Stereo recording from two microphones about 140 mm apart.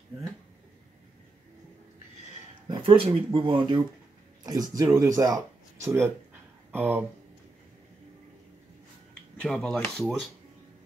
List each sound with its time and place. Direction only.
2.7 s speech: 40° right (ahead or behind); by 7.1 s 15° right (ahead or behind)
9.4 s speech: 5° left (ahead or behind)